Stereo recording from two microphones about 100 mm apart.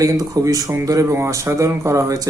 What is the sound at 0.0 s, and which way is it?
Speech, 35° right (ahead or behind).